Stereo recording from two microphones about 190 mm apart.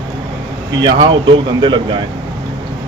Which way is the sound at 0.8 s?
20° right (ahead or behind).